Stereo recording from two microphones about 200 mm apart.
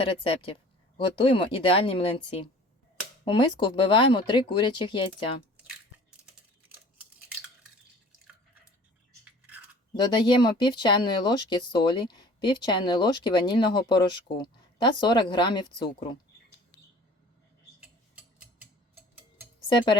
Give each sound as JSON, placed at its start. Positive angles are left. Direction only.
{"t": 0.0, "sound": "speech", "side_deg": 25}
{"t": 6.6, "sound": "a sound", "side_deg": -10}
{"t": 9.9, "sound": "speech", "side_deg": 20}
{"t": 17.7, "sound": "tick-tock", "side_deg": -5}
{"t": 19.6, "sound": "speech", "side_deg": 25}